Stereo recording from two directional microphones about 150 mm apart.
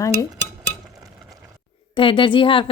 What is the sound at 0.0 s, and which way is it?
Dishes, 20° left (ahead or behind).